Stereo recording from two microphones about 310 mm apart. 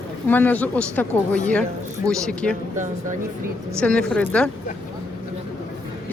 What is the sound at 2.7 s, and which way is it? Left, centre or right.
Speech, right.